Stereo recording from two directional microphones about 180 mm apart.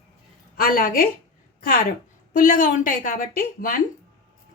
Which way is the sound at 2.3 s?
50° left (ahead or behind).